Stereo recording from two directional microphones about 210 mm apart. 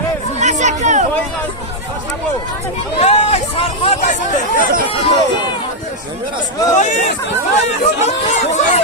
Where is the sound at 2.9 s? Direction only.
30° left (ahead or behind).